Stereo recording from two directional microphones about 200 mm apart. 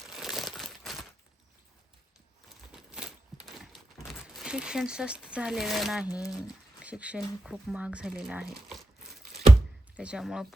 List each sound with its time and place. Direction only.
0.2 s crumpling: centre (ahead or behind)
2.7 s a sound: 5° right (ahead or behind)
3.6 s speech: centre (ahead or behind)
6.2 s speech: 20° left (ahead or behind)
6.8 s speech: 5° right (ahead or behind)
10.0 s speech: 5° right (ahead or behind)